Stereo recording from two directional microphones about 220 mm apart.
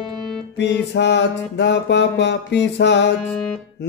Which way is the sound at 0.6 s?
50° left (ahead or behind).